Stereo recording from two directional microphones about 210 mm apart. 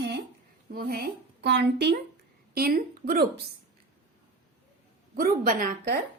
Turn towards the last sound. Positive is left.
turn(degrees=-45)  # may be behind; listen again after turning